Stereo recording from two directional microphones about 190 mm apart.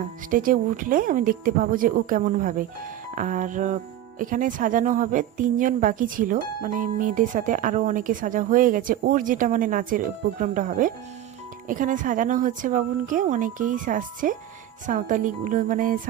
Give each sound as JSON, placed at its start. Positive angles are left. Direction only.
{"t": 0.3, "sound": "speech", "side_deg": -45}